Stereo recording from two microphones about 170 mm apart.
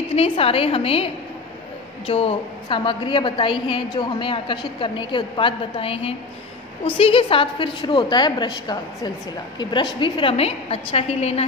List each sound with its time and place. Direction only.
0.1 s a woman's voice: 35° left (ahead or behind)